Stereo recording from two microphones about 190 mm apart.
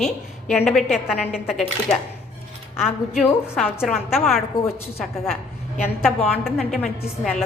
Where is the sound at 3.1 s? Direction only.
Centre (ahead or behind).